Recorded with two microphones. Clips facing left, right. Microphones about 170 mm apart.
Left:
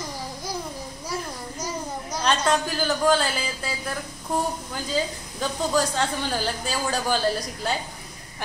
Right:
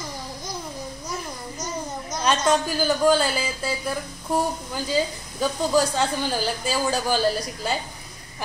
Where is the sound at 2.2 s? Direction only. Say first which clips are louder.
Right 2 dB; 5° right (ahead or behind).